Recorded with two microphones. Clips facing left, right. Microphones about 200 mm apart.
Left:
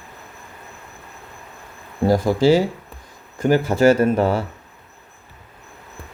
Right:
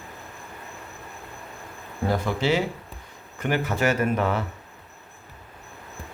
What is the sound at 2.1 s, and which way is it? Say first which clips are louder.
Speech: left 8 dB; 35° left (ahead or behind).